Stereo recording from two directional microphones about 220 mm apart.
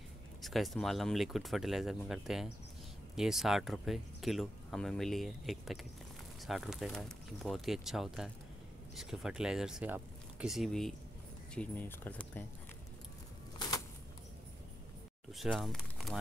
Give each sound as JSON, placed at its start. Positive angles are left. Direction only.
{"t": 0.4, "sound": "speech", "side_deg": 0}
{"t": 13.6, "sound": "a sound", "side_deg": 15}
{"t": 15.3, "sound": "speech", "side_deg": 0}